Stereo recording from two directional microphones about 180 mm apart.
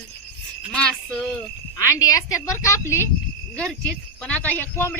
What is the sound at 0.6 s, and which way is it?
Speech, 5° left (ahead or behind).